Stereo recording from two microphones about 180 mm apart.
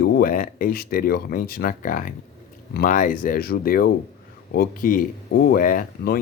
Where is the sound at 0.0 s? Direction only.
55° left (ahead or behind).